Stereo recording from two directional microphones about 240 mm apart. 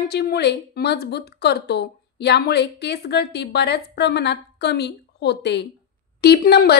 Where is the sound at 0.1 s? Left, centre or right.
Left.